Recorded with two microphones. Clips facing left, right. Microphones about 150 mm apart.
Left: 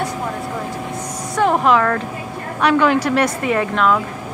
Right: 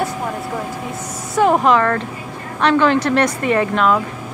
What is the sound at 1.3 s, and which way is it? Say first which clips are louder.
A woman's voice: right 1 dB; 5° right (ahead or behind).